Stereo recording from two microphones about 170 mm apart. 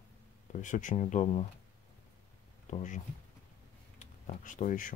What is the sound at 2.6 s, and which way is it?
Speech, 45° left (ahead or behind).